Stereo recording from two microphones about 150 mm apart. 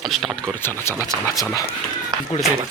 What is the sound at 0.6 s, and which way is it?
Speech, 20° left (ahead or behind).